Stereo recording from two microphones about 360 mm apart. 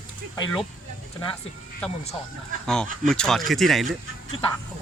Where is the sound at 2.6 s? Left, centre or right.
Centre.